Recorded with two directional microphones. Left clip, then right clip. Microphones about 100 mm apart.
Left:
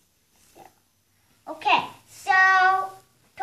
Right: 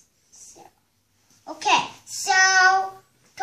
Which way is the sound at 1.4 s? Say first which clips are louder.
Right 1 dB; 10° right (ahead or behind).